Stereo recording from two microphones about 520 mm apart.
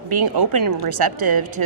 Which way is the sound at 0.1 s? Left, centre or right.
Right.